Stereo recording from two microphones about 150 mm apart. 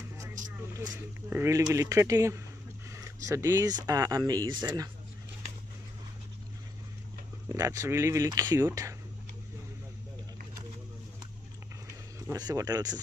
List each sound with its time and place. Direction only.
0.4 s vehicle: 60° right (ahead or behind)
0.7 s speech: 20° right (ahead or behind)
7.4 s speech: 20° right (ahead or behind)
12.3 s speech: 25° right (ahead or behind)